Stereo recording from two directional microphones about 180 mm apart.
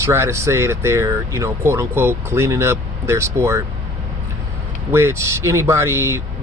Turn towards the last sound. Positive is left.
turn(degrees=-15)  # may be behind; listen again after turning